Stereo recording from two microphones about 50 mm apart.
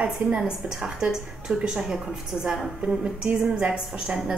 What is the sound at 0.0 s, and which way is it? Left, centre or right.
A woman's voice, centre.